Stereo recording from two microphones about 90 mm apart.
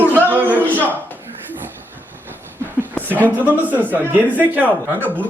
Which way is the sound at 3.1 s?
20° right (ahead or behind).